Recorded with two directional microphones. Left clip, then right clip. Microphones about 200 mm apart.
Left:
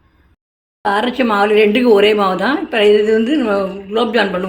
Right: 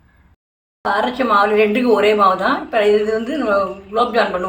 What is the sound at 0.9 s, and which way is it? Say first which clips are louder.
A woman's voice: left 1 dB; 45° left (ahead or behind).